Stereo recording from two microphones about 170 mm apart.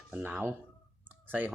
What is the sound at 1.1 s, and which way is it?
Clicking, 10° right (ahead or behind).